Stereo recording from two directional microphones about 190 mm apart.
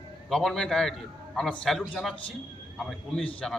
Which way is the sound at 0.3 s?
Centre (ahead or behind).